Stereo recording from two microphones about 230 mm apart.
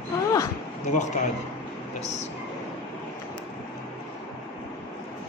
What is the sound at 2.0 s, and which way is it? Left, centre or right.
Speech, left.